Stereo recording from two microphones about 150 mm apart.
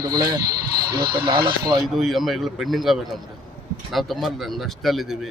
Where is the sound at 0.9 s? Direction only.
90° right.